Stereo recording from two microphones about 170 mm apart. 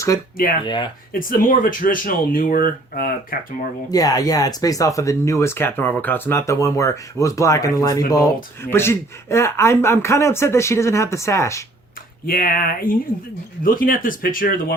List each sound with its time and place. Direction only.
0.6 s speech: 25° left (ahead or behind)
1.1 s speech: 55° left (ahead or behind)
3.9 s speech: 20° left (ahead or behind)
12.2 s speech: 60° left (ahead or behind)